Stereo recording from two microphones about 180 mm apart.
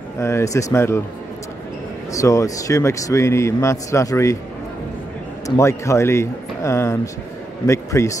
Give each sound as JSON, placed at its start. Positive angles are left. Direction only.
{"t": 0.2, "sound": "a man's voice", "side_deg": 15}
{"t": 2.1, "sound": "a man's voice", "side_deg": 15}
{"t": 5.6, "sound": "a man's voice", "side_deg": 15}